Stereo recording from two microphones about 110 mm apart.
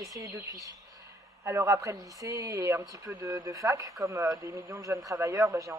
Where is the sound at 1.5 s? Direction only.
25° right (ahead or behind).